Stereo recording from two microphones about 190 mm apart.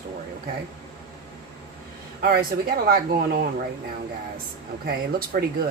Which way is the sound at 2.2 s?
50° right (ahead or behind).